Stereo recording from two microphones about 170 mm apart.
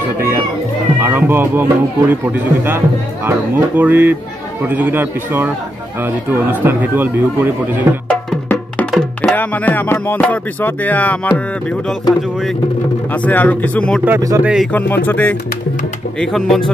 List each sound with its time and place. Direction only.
1.0 s speech: 10° right (ahead or behind)
8.1 s wood block: 5° left (ahead or behind)
8.9 s music: 5° left (ahead or behind)
13.1 s music: 10° left (ahead or behind)
14.0 s speech: 15° right (ahead or behind)
14.4 s speech: 5° right (ahead or behind)
14.7 s music: 10° left (ahead or behind)
16.2 s speech: centre (ahead or behind)